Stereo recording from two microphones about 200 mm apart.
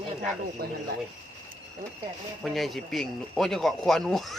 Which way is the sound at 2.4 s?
Centre (ahead or behind).